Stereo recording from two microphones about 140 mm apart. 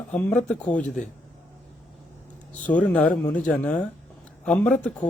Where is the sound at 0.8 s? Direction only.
65° left (ahead or behind).